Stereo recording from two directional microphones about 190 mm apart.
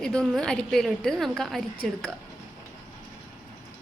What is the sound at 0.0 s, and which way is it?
Speech, 5° left (ahead or behind).